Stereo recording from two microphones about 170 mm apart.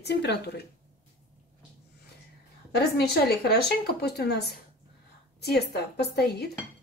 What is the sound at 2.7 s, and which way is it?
A woman's voice, 70° left (ahead or behind).